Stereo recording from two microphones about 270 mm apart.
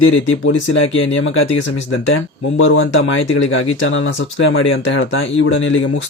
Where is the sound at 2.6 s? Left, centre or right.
Left.